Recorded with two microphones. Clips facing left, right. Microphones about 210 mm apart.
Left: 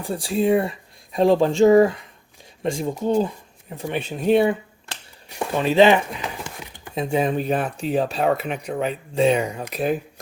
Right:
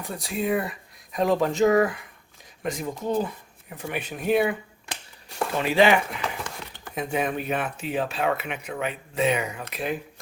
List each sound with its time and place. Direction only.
0.0 s speech: 30° left (ahead or behind)
5.6 s a sound: 25° left (ahead or behind)
6.9 s speech: 25° left (ahead or behind)